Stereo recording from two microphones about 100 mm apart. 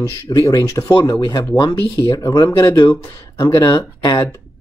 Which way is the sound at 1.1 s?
40° left (ahead or behind).